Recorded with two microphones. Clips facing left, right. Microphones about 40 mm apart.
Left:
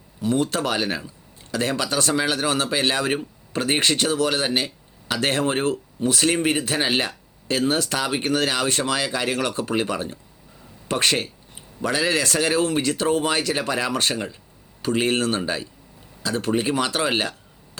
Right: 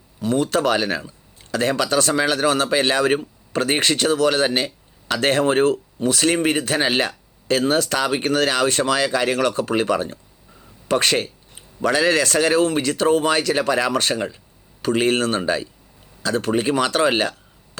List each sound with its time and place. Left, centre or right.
0.2 s speech: right
4.4 s speech: right
5.1 s speech: right